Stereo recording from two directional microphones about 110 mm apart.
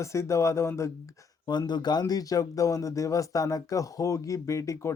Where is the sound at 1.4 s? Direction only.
40° left (ahead or behind).